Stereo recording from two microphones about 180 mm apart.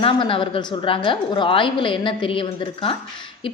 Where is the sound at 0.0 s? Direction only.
30° left (ahead or behind).